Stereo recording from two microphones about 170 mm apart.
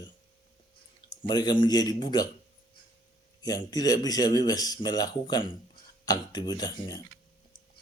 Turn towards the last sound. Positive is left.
turn(degrees=25)  # may be behind; listen again after turning